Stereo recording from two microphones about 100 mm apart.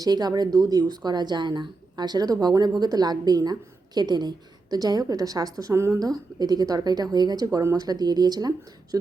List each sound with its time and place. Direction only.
0.0 s speech: 40° right (ahead or behind)